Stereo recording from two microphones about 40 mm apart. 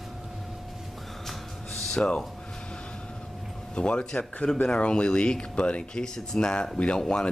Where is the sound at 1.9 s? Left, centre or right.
Left.